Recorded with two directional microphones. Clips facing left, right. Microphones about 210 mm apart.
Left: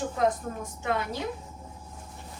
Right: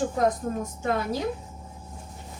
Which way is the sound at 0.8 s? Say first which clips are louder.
Right 2 dB; 40° right (ahead or behind).